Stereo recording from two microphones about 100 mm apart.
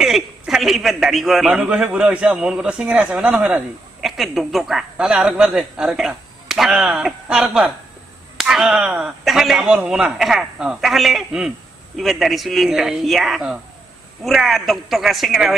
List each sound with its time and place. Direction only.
0.0 s a man's voice: 5° right (ahead or behind)
4.0 s a man's voice: centre (ahead or behind)